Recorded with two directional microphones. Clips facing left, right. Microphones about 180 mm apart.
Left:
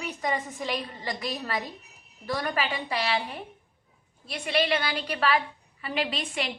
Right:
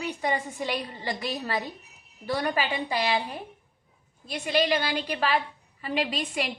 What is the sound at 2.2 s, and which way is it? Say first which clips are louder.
Speech: right 2 dB; 15° right (ahead or behind).